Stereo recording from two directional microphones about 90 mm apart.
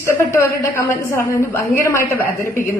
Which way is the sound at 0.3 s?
30° left (ahead or behind).